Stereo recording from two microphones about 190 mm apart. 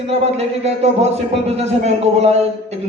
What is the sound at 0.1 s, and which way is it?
A man's voice, 35° right (ahead or behind).